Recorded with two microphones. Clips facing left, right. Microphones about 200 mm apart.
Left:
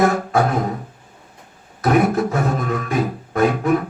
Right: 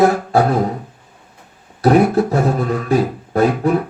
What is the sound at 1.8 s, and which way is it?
Beatboxing, 35° right (ahead or behind).